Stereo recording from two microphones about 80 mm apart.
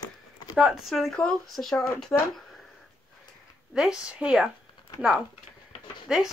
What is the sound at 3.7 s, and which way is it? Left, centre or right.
Speech, centre.